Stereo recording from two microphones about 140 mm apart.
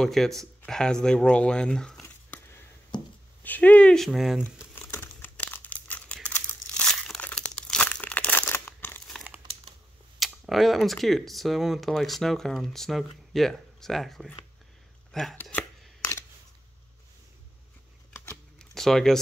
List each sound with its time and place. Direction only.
0.0 s speech: centre (ahead or behind)
2.9 s speech: 30° left (ahead or behind)
3.4 s speech: 10° left (ahead or behind)
4.4 s crumpling: 15° left (ahead or behind)
10.1 s speech: centre (ahead or behind)
15.1 s a sound: centre (ahead or behind)
18.1 s shuffling cards: 15° left (ahead or behind)
18.8 s speech: 5° left (ahead or behind)